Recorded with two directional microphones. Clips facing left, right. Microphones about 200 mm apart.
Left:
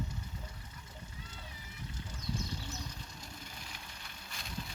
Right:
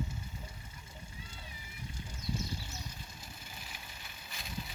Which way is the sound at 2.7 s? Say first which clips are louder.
Left 2 dB; 10° right (ahead or behind).